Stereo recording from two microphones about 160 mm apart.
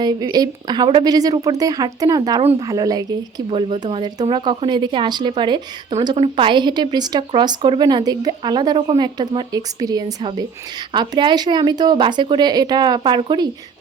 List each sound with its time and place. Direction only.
0.0 s speech: 25° right (ahead or behind)
3.5 s speech: 35° right (ahead or behind)